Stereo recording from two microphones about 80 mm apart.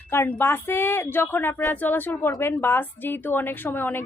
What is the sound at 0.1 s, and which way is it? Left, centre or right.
A woman's voice, left.